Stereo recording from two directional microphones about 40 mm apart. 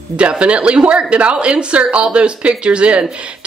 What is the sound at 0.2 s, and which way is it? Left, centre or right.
Speech, right.